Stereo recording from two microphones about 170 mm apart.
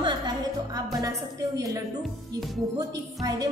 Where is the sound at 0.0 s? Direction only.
25° right (ahead or behind).